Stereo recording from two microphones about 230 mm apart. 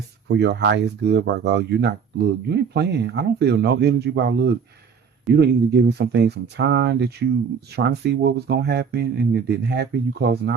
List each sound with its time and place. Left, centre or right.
0.3 s speech: right